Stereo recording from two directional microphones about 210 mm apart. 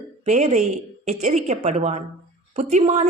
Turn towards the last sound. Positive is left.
turn(degrees=-30)  # may be behind; listen again after turning